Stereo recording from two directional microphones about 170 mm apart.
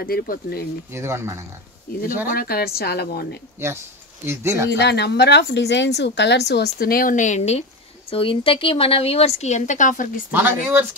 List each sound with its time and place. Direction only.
0.0 s a woman's voice: 65° left (ahead or behind)
0.9 s speech: 15° right (ahead or behind)
1.9 s a woman's voice: 60° left (ahead or behind)
3.6 s speech: 15° right (ahead or behind)
4.6 s a woman's voice: 85° left; by 10.2 s 50° left (ahead or behind)